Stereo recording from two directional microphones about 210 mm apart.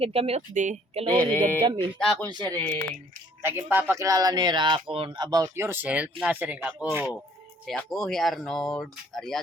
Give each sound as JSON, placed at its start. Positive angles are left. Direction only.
{"t": 0.0, "sound": "speech", "side_deg": -30}
{"t": 1.2, "sound": "speech", "side_deg": 10}
{"t": 1.6, "sound": "speech", "side_deg": -20}
{"t": 2.0, "sound": "speech", "side_deg": 0}
{"t": 2.3, "sound": "speech", "side_deg": -20}
{"t": 2.6, "sound": "speech", "side_deg": 5}
{"t": 3.4, "sound": "speech", "side_deg": -10}
{"t": 7.7, "sound": "speech", "side_deg": 0}